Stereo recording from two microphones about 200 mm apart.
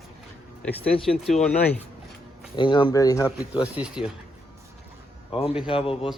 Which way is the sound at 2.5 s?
25° left (ahead or behind).